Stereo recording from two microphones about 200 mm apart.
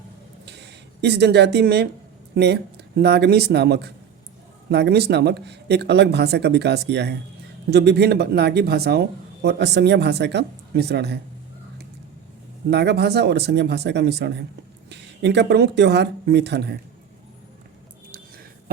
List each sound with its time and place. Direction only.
0.4 s a sound: 55° right (ahead or behind)
2.3 s speech: 55° right (ahead or behind)
12.7 s speech: 55° right (ahead or behind)